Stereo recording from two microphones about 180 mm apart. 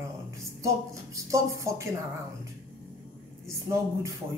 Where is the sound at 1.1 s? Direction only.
15° right (ahead or behind).